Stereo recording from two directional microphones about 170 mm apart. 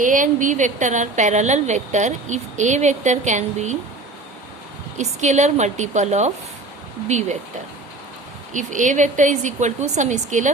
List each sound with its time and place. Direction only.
0.0 s a woman's voice: 50° right (ahead or behind)
4.9 s a woman's voice: 45° right (ahead or behind)
8.5 s a woman's voice: 50° right (ahead or behind)